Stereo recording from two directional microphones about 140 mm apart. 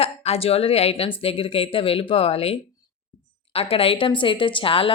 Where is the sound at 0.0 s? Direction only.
45° left (ahead or behind).